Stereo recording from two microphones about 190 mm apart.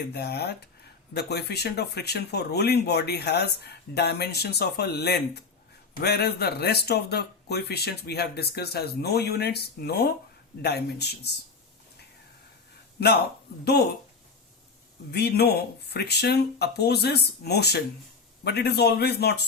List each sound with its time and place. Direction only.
0.1 s speech: 60° left (ahead or behind)
13.0 s speech: 60° left (ahead or behind)
15.1 s speech: 60° left (ahead or behind)